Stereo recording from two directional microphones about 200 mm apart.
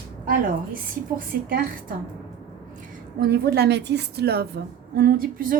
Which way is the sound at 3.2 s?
50° right (ahead or behind).